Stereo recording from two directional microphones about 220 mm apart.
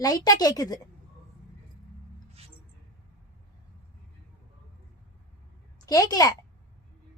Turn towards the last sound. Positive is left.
turn(degrees=15)  # may be behind; listen again after turning